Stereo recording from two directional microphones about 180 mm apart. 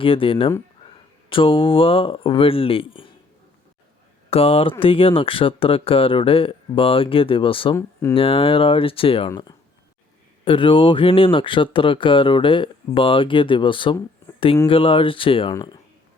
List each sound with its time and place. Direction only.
0.0 s speech: 30° left (ahead or behind)
4.3 s speech: 30° left (ahead or behind)
10.4 s speech: 30° left (ahead or behind)